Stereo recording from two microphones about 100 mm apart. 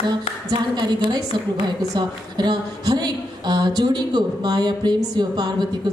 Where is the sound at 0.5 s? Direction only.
45° right (ahead or behind).